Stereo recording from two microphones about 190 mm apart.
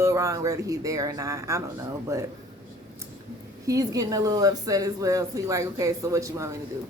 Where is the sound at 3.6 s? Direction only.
20° right (ahead or behind).